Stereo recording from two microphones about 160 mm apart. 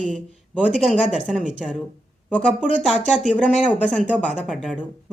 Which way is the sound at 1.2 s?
5° right (ahead or behind).